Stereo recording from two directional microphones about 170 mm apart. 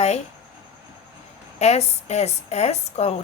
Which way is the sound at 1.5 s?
40° left (ahead or behind).